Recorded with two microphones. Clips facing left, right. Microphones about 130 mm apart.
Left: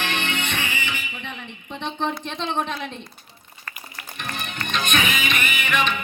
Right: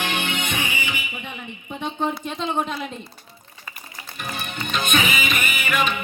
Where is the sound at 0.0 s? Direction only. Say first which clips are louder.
Right 1 dB; 10° right (ahead or behind).